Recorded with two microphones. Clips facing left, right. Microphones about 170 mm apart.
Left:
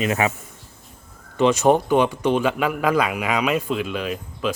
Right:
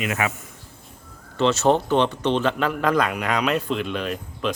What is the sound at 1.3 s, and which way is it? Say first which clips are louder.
Speech: left 2 dB; 15° left (ahead or behind).